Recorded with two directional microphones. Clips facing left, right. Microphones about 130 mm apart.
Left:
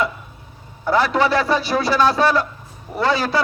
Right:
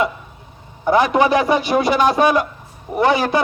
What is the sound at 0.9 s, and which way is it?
A man's voice, 20° right (ahead or behind).